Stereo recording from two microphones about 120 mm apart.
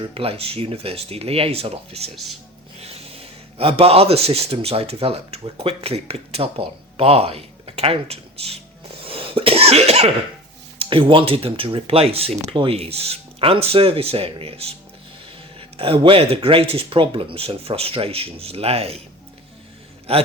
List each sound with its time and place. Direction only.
0.1 s speech: 55° right (ahead or behind)
9.0 s cough: 50° right (ahead or behind)
10.8 s speech: 45° right (ahead or behind)
20.1 s speech: 55° right (ahead or behind)